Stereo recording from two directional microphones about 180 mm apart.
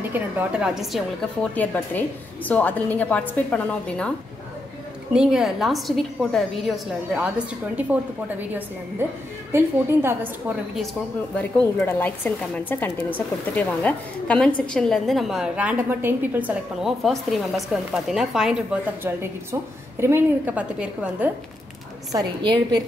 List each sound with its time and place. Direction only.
0.1 s a woman's voice: 10° right (ahead or behind)
5.1 s a woman's voice: 5° right (ahead or behind)
11.3 s a woman's voice: 10° left (ahead or behind); by 21.3 s 5° right (ahead or behind)
22.1 s a woman's voice: 25° right (ahead or behind)